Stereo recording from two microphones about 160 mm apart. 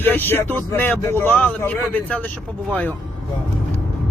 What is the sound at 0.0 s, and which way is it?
Speech, 10° left (ahead or behind).